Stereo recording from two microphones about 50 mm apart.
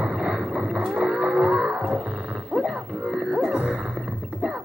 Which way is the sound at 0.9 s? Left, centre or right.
Centre.